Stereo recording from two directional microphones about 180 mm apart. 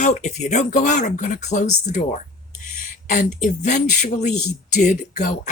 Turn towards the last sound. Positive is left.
turn(degrees=45)  # may be behind; listen again after turning